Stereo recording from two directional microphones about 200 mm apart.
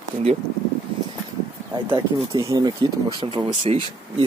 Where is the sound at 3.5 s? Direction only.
30° right (ahead or behind).